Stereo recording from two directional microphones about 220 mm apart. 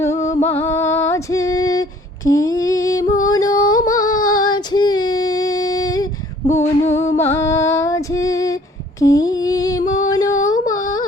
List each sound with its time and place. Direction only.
0.0 s music: 15° left (ahead or behind)
2.3 s humming: 15° left (ahead or behind)
3.2 s female singing: 15° left (ahead or behind)
9.0 s a sound: 15° left (ahead or behind)